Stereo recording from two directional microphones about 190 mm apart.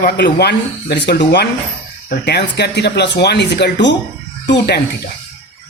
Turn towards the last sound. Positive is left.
turn(degrees=60)  # may be behind; listen again after turning